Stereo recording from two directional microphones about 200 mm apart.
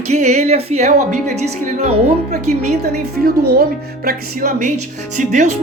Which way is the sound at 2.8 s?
50° right (ahead or behind).